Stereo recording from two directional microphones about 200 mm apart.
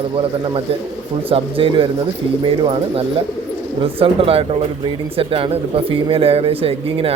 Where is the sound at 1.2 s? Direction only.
25° right (ahead or behind).